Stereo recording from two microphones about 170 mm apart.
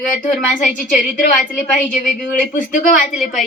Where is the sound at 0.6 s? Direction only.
50° left (ahead or behind).